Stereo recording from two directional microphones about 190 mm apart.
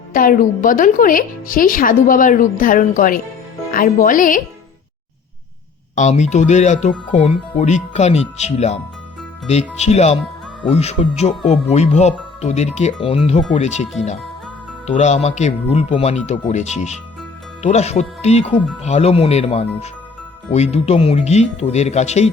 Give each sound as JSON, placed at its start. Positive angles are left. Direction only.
{"t": 0.1, "sound": "speech", "side_deg": 50}
{"t": 6.0, "sound": "speech", "side_deg": 35}
{"t": 14.8, "sound": "speech", "side_deg": 35}